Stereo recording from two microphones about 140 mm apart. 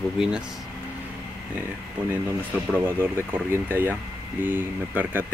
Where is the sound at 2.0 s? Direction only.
10° right (ahead or behind).